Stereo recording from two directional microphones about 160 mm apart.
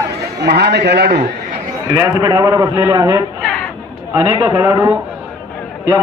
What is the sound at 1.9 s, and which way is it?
A man's voice, 20° right (ahead or behind).